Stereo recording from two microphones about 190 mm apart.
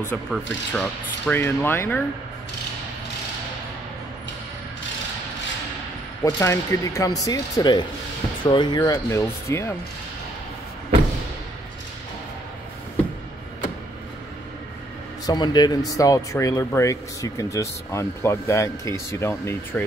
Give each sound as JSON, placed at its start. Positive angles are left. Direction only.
{"t": 0.3, "sound": "speech", "side_deg": 5}
{"t": 6.2, "sound": "speech", "side_deg": 15}
{"t": 15.2, "sound": "speech", "side_deg": 20}